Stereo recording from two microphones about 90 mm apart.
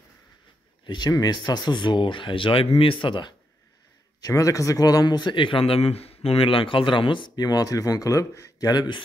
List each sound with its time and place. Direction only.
0.8 s speech: 55° left (ahead or behind)
4.2 s a man's voice: 40° left (ahead or behind); by 9.0 s 55° left (ahead or behind)